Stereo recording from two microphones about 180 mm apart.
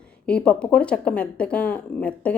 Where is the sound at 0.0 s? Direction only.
5° left (ahead or behind).